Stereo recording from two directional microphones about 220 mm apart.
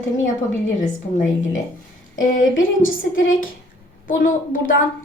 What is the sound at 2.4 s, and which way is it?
Speech, 60° left (ahead or behind).